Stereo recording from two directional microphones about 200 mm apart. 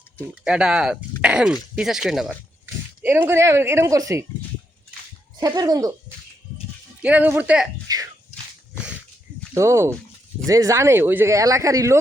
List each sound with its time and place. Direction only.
0.4 s speech: 5° right (ahead or behind)
5.4 s speech: 20° right (ahead or behind)
7.0 s speech: 10° right (ahead or behind)
7.9 s a sound: 20° right (ahead or behind)
9.6 s speech: 15° right (ahead or behind)